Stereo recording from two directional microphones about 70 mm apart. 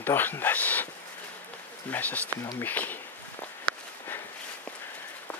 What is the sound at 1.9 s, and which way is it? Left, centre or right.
Speech, left.